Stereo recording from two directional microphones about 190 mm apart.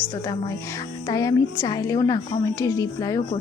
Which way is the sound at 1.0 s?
20° left (ahead or behind).